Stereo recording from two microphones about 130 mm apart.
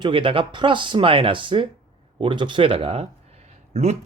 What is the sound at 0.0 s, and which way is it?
Speech, 40° right (ahead or behind).